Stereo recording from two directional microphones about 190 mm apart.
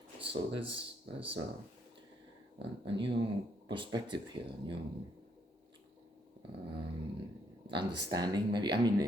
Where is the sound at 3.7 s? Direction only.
25° right (ahead or behind).